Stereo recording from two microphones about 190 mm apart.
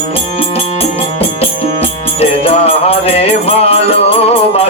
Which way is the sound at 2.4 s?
30° left (ahead or behind).